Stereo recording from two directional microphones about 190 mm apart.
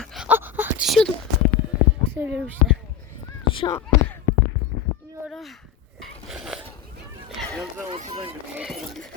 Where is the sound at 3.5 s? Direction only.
25° left (ahead or behind).